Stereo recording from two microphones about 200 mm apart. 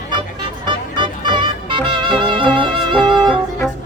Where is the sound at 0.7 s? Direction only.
25° right (ahead or behind).